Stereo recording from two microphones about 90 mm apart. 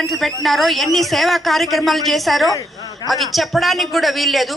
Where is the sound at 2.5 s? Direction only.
40° left (ahead or behind).